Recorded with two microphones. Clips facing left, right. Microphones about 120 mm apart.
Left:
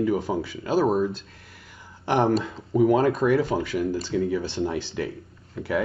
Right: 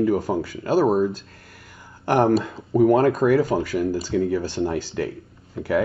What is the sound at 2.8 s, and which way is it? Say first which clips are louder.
Speech: right 3 dB; centre (ahead or behind).